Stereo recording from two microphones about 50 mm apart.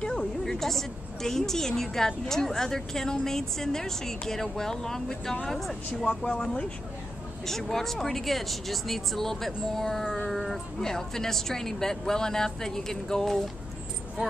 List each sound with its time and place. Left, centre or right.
0.0 s a sound: centre
0.5 s a woman's voice: centre
6.0 s speech: centre
7.4 s speech: centre
9.8 s a sound: centre
10.8 s a woman's voice: centre